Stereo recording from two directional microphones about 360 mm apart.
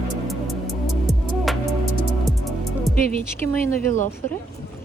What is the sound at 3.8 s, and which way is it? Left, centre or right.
Speech, left.